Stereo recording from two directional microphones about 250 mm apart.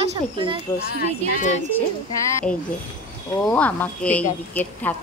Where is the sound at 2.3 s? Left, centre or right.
Centre.